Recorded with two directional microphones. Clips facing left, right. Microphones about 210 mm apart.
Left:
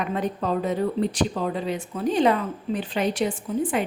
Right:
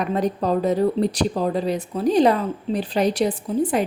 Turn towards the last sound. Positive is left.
turn(degrees=-40)  # may be behind; listen again after turning